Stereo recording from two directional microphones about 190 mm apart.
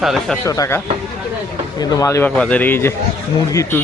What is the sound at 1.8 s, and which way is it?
Speech, 15° left (ahead or behind).